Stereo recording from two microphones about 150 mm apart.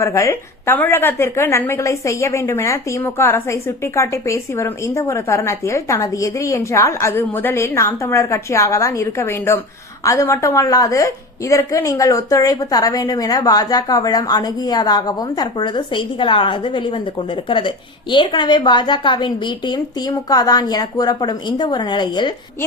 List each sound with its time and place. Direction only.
0.0 s a woman's voice: 20° left (ahead or behind)